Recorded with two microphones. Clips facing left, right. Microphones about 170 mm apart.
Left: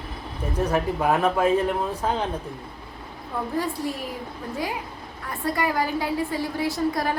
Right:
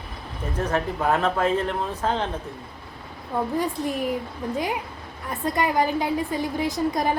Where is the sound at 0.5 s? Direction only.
10° left (ahead or behind).